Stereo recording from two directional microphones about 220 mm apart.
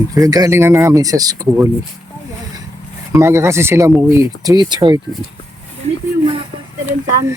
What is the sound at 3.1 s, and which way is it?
Speech, 10° right (ahead or behind).